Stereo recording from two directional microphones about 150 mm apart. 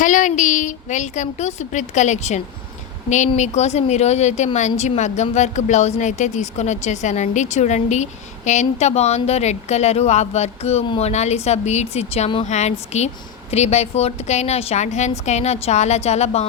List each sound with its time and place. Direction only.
0.0 s a woman's voice: 55° left (ahead or behind)